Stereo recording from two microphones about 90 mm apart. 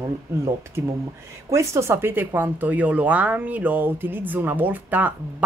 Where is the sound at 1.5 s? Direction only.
30° right (ahead or behind).